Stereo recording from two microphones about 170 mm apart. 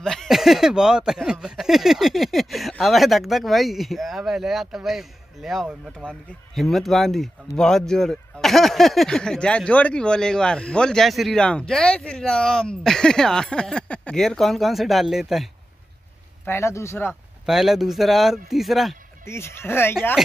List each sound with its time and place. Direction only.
0.0 s speech: 5° left (ahead or behind)
16.4 s speech: 15° left (ahead or behind)
17.1 s speech: centre (ahead or behind)
19.2 s speech: 15° left (ahead or behind)